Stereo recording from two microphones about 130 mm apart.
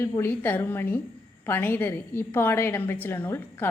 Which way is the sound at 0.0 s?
20° left (ahead or behind).